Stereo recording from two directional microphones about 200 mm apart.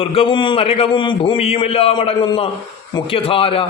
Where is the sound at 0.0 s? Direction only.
25° left (ahead or behind).